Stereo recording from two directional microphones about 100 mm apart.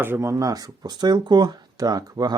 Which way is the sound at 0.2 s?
30° right (ahead or behind).